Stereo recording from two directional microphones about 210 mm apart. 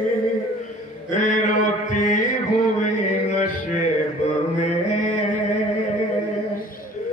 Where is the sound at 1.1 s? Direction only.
35° left (ahead or behind).